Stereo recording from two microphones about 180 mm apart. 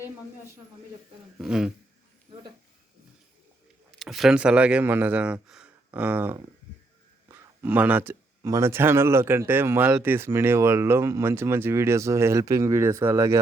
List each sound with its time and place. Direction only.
1.4 s speech: 5° right (ahead or behind)
2.3 s speech: 25° right (ahead or behind)
3.9 s speech: centre (ahead or behind)
7.6 s speech: 10° right (ahead or behind)